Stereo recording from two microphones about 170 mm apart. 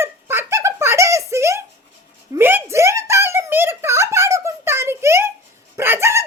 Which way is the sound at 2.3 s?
10° right (ahead or behind).